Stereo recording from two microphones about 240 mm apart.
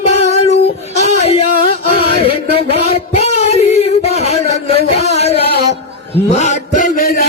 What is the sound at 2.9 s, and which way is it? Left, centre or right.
Child singing, left.